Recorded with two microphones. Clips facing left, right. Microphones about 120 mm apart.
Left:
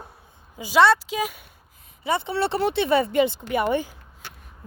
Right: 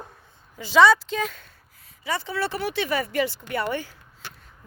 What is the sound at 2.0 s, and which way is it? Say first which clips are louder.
Speech: left 4 dB; 20° left (ahead or behind).